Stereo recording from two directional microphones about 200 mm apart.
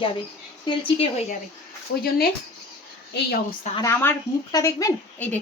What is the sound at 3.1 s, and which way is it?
Speech, 50° left (ahead or behind).